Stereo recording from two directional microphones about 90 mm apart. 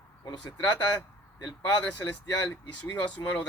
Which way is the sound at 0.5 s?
50° left (ahead or behind).